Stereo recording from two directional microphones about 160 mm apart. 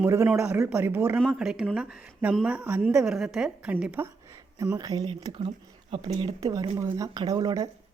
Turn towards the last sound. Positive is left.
turn(degrees=-25)  # may be behind; listen again after turning